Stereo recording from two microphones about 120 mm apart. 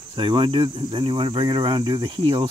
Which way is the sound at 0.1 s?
40° right (ahead or behind).